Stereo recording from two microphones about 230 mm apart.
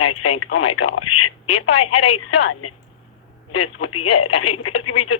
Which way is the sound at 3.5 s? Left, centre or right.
Left.